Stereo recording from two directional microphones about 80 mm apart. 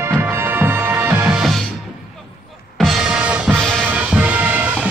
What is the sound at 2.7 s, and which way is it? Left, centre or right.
Music, centre.